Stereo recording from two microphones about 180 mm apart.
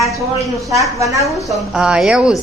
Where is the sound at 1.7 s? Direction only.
5° right (ahead or behind).